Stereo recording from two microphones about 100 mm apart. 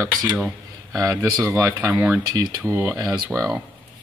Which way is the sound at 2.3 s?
40° right (ahead or behind).